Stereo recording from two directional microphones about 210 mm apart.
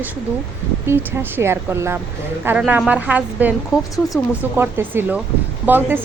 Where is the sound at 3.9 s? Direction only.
15° left (ahead or behind).